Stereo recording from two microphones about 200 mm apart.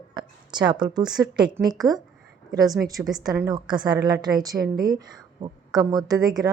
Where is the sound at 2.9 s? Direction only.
15° right (ahead or behind).